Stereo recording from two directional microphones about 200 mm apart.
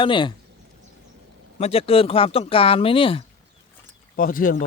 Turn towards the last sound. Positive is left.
turn(degrees=45)  # may be behind; listen again after turning